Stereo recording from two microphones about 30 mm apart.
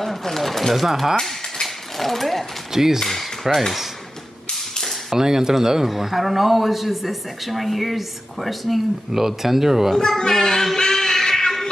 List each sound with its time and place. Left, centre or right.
0.0 s a man's voice: centre
1.6 s a sound: centre
2.7 s speech: centre
3.0 s a man's voice: centre
5.1 s speech: centre
5.9 s a man's voice: centre
9.1 s speech: centre
10.0 s speech: centre
10.8 s a sound: centre